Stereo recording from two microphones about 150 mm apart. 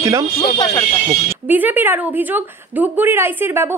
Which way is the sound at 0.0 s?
25° right (ahead or behind).